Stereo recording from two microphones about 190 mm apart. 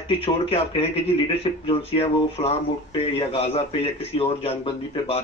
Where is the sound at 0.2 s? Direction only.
30° left (ahead or behind).